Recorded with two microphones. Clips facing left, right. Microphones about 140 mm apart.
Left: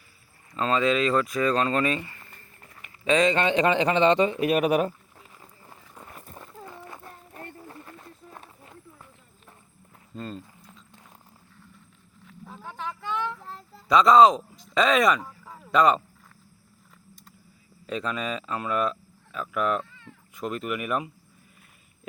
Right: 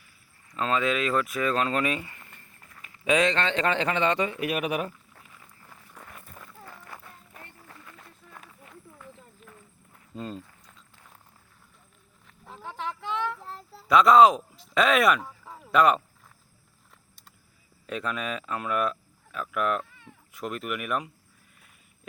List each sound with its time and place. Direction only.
0.5 s speech: 5° right (ahead or behind)
3.2 s speech: 15° left (ahead or behind); by 4.9 s 35° left (ahead or behind)
5.3 s a sound: 30° left (ahead or behind)
5.9 s a sound: 20° left (ahead or behind)
6.1 s run: 30° left (ahead or behind)
7.0 s run: 35° left (ahead or behind)
10.2 s speech: 10° right (ahead or behind)
12.2 s a sound: centre (ahead or behind)
17.8 s speech: 5° right (ahead or behind)
19.8 s cat: 15° right (ahead or behind)
20.3 s speech: centre (ahead or behind)